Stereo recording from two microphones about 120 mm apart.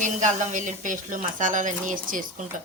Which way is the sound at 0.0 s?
90° right.